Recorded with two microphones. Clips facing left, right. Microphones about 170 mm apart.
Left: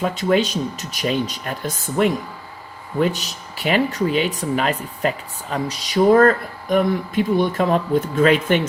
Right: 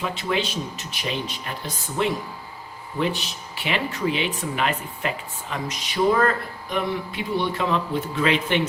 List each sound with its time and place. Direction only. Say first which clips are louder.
0.0 s speech: left 7 dB; 45° left (ahead or behind)